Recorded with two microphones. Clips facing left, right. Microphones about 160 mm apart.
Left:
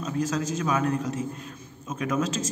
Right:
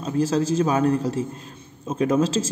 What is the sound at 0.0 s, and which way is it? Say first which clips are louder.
A man's voice: right 6 dB; 30° right (ahead or behind).